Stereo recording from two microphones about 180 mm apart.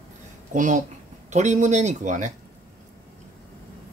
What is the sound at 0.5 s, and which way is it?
Speech, 45° right (ahead or behind).